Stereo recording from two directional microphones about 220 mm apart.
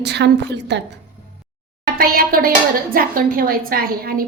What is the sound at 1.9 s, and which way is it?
A woman's voice, 40° right (ahead or behind).